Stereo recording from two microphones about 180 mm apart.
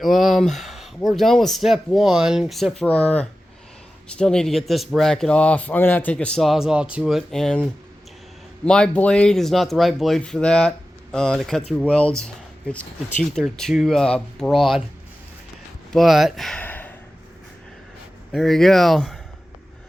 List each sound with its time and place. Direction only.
0.0 s speech: centre (ahead or behind)
15.9 s speech: centre (ahead or behind)
18.3 s speech: centre (ahead or behind)